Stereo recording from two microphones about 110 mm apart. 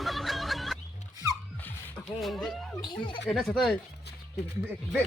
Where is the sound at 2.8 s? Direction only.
50° left (ahead or behind).